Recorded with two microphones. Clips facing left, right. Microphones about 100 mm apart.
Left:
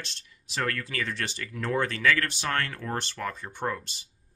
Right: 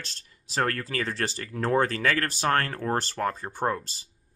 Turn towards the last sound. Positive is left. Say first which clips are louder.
# right 4 dB
turn(degrees=-35)  # may be behind; listen again after turning